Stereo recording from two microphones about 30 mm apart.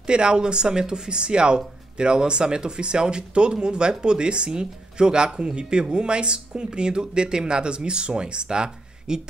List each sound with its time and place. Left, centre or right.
0.0 s speech: right